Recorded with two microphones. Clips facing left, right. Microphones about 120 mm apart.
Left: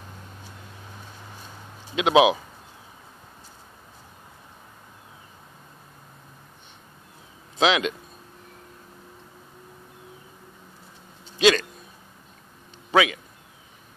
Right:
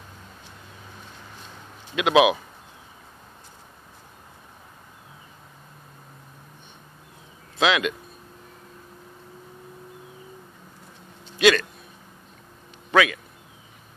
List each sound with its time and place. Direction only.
2.0 s speech: 25° left (ahead or behind)
7.5 s speech: 25° left (ahead or behind)
11.3 s speech: 25° left (ahead or behind)
12.9 s a man's voice: 20° left (ahead or behind)